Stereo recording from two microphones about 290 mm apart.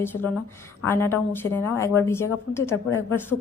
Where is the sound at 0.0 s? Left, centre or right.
Centre.